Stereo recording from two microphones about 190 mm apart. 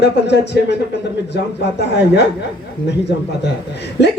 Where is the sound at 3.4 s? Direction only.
60° left (ahead or behind).